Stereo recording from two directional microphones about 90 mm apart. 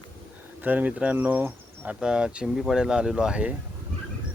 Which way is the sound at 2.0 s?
10° right (ahead or behind).